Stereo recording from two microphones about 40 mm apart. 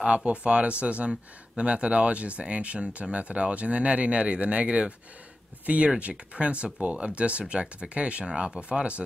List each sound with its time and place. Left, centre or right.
0.0 s speech: right
5.9 s speech: right